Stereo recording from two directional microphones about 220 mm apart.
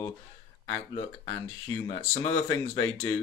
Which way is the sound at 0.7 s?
20° left (ahead or behind).